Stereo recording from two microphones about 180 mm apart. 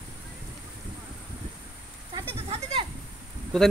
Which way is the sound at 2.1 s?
30° right (ahead or behind).